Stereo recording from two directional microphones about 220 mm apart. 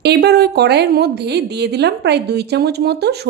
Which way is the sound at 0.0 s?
50° right (ahead or behind).